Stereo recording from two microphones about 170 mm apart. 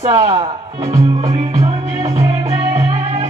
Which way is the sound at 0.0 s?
40° right (ahead or behind).